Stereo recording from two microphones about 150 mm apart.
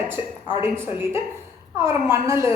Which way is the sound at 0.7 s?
15° right (ahead or behind).